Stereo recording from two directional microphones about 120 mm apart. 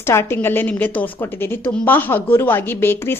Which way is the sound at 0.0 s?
20° left (ahead or behind).